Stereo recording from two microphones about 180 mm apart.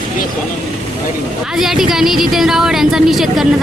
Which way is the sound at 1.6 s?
Centre (ahead or behind).